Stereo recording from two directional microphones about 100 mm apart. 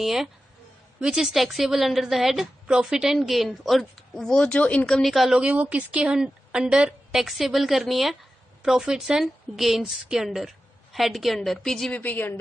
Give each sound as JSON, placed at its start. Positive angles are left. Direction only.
{"t": 0.0, "sound": "a woman's voice", "side_deg": -5}
{"t": 11.9, "sound": "a woman's voice", "side_deg": 15}